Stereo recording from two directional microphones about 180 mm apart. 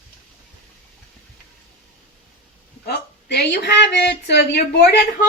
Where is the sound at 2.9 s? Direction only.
65° left (ahead or behind).